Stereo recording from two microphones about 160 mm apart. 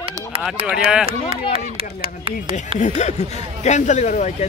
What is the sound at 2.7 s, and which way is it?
Speech, 45° left (ahead or behind).